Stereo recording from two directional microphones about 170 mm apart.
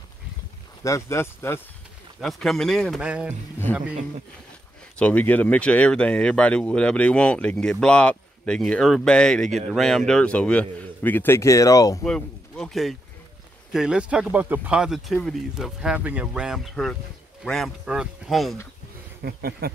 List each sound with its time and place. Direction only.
0.8 s speech: 15° left (ahead or behind)
2.1 s speech: centre (ahead or behind)
3.7 s speech: 10° left (ahead or behind)
4.9 s speech: 10° left (ahead or behind)
12.0 s speech: 5° left (ahead or behind)
19.2 s speech: 65° right (ahead or behind)